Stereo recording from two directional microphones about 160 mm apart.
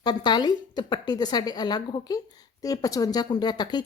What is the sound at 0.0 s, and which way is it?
A woman's voice, 25° left (ahead or behind).